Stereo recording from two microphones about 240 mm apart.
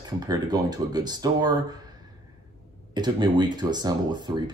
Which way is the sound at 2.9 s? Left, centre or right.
Centre.